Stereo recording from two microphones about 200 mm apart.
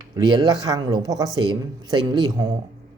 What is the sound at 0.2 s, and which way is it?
Speech, 20° right (ahead or behind).